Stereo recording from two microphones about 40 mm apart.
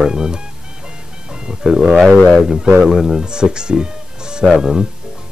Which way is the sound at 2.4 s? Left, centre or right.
Centre.